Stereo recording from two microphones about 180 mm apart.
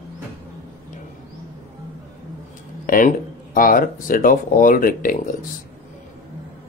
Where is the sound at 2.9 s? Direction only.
50° left (ahead or behind).